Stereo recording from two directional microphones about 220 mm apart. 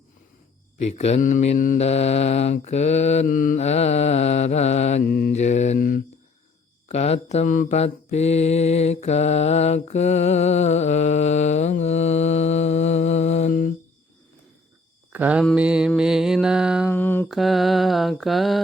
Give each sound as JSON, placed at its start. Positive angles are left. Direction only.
{"t": 0.8, "sound": "mantra", "side_deg": 30}
{"t": 5.0, "sound": "mantra", "side_deg": 45}
{"t": 5.3, "sound": "mantra", "side_deg": 30}
{"t": 15.1, "sound": "speech", "side_deg": -5}
{"t": 15.4, "sound": "mantra", "side_deg": -5}
{"t": 16.9, "sound": "mantra", "side_deg": 10}